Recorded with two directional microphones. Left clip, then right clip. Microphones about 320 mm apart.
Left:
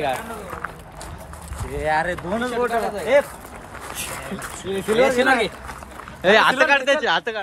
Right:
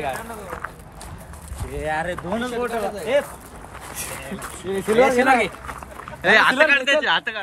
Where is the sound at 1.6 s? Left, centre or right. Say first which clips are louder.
Left 4 dB; centre.